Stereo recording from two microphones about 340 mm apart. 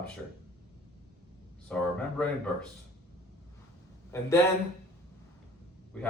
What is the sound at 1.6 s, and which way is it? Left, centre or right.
Speech, centre.